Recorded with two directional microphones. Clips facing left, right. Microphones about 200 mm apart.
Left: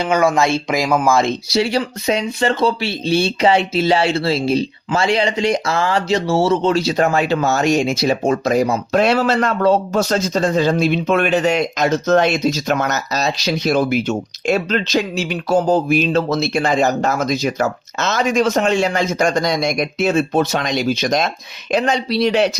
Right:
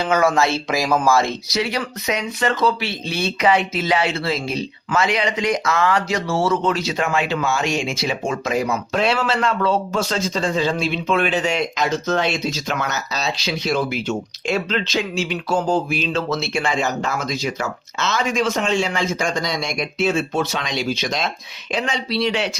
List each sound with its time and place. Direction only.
0.0 s speech: 15° left (ahead or behind)
1.5 s speech: 30° left (ahead or behind)